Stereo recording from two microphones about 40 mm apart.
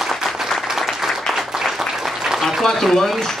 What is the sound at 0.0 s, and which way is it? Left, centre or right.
Applause, centre.